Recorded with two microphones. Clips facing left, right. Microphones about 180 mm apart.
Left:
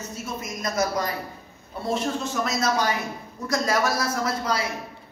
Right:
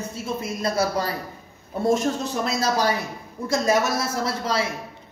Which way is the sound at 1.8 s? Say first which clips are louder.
Right 5 dB; 45° right (ahead or behind).